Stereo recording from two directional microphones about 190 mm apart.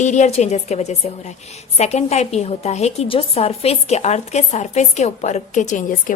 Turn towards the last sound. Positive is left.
turn(degrees=40)  # may be behind; listen again after turning